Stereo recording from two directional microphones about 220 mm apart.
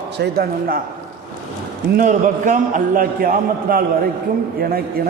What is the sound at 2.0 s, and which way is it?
A man's voice, 35° right (ahead or behind).